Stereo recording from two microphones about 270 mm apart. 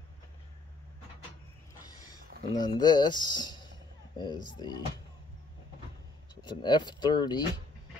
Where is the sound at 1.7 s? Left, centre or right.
Centre.